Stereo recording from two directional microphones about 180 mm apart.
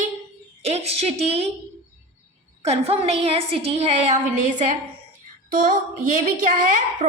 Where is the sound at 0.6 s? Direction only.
35° right (ahead or behind).